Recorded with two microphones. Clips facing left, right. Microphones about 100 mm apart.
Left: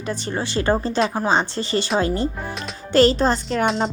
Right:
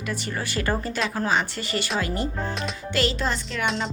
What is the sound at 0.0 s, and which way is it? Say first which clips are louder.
A woman's voice: left 4 dB; 30° left (ahead or behind).